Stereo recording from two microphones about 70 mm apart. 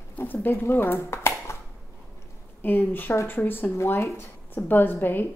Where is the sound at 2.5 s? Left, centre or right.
Left.